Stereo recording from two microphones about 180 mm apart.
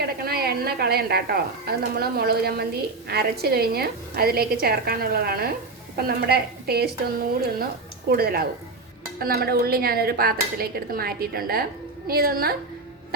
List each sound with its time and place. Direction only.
0.0 s a woman's voice: 60° right (ahead or behind)
8.1 s a woman's voice: 60° right (ahead or behind)